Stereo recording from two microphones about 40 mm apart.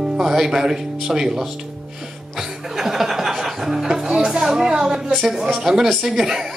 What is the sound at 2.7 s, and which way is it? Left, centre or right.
Speech, centre.